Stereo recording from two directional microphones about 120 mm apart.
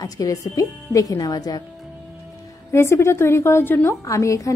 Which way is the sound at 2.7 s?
20° left (ahead or behind).